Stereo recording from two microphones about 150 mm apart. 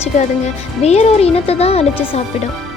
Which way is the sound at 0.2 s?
45° left (ahead or behind).